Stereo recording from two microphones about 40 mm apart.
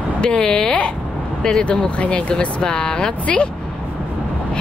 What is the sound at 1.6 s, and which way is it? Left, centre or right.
Speech, left.